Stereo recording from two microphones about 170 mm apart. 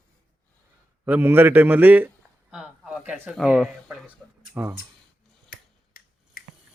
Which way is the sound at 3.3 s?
Centre (ahead or behind).